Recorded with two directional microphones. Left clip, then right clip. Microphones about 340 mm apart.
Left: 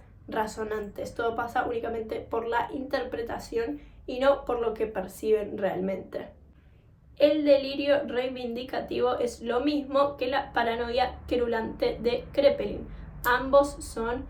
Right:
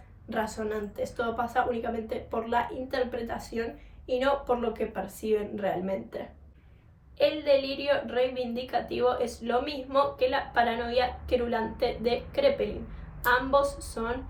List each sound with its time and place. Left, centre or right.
0.3 s a woman's voice: centre
7.2 s a woman's voice: centre